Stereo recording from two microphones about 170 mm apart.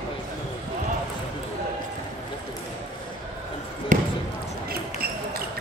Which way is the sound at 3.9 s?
45° right (ahead or behind).